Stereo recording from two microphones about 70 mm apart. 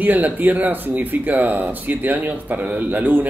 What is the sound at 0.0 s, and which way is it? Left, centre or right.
Speech, right.